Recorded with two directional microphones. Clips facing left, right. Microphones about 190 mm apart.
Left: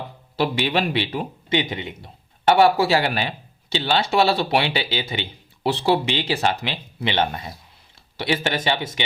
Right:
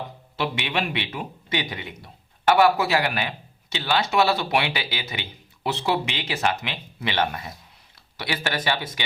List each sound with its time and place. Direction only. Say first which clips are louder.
0.3 s a man's voice: left 5 dB; 35° left (ahead or behind)